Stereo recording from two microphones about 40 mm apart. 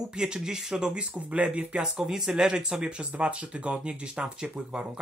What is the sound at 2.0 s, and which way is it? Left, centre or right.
Speech, centre.